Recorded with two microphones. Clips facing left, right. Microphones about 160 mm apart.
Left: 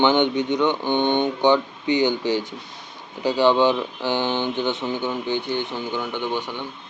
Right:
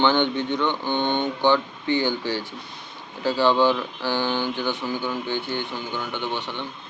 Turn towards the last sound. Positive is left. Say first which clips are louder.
# left 3 dB
turn(degrees=10)  # may be behind; listen again after turning